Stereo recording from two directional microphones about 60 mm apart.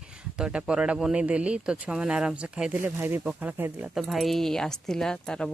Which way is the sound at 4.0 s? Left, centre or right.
Centre.